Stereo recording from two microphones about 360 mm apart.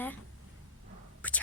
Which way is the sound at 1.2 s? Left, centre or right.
Centre.